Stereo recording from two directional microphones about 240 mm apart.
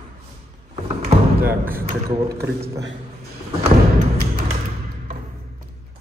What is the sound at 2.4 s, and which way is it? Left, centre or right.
Speech, centre.